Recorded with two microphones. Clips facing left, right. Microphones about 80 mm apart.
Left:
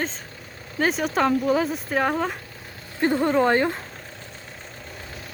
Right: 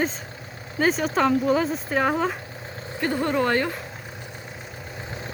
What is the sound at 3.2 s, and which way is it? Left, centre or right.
Speech, centre.